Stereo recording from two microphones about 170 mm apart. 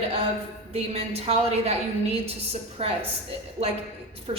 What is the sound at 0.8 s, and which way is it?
A woman's voice, 35° right (ahead or behind).